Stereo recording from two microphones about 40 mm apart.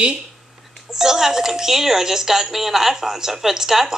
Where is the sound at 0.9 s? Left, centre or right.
Centre.